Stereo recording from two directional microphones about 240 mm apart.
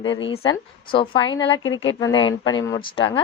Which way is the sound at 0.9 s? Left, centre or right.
Left.